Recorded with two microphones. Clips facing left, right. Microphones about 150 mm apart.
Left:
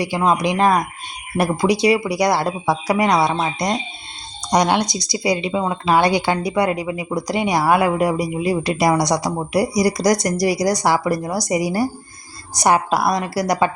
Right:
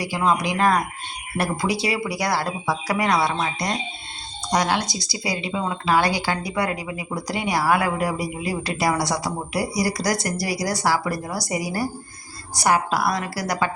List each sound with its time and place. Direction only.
0.0 s a woman's voice: 20° left (ahead or behind)
4.5 s a woman's voice: 20° left (ahead or behind)